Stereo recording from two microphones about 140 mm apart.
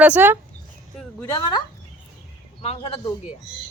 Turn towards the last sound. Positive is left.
turn(degrees=40)  # may be behind; listen again after turning